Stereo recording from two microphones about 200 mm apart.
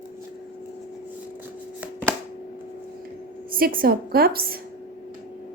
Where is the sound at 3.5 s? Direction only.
45° right (ahead or behind).